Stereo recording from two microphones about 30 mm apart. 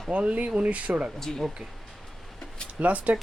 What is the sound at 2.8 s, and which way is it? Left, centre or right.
Speech, right.